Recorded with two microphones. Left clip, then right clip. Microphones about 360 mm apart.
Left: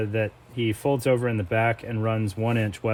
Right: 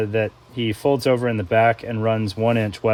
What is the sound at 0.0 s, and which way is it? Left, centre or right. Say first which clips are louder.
Speech: right 5 dB; right.